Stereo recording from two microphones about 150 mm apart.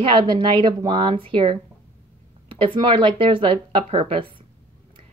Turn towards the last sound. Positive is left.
turn(degrees=-35)  # may be behind; listen again after turning